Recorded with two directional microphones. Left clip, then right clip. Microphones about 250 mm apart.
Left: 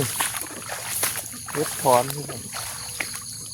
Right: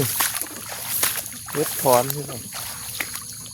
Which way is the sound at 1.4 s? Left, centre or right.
Centre.